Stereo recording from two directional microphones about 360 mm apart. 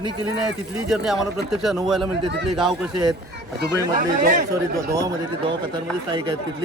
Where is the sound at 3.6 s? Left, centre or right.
Right.